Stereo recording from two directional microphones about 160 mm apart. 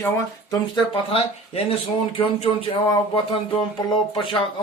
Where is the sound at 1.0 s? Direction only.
40° left (ahead or behind).